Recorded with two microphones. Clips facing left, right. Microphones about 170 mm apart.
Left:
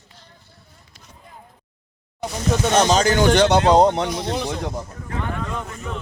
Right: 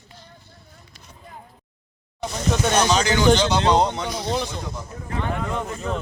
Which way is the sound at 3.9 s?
55° left (ahead or behind).